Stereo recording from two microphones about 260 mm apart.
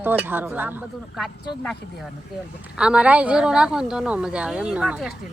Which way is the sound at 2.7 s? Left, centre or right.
Centre.